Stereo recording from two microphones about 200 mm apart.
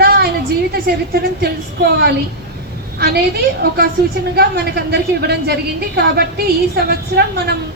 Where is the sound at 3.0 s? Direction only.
50° right (ahead or behind).